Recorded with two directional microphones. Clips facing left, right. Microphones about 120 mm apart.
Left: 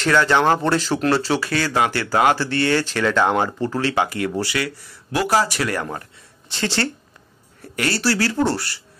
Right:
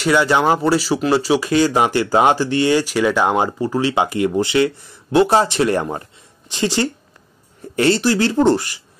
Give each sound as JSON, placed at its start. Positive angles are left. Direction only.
{"t": 0.0, "sound": "speech", "side_deg": -15}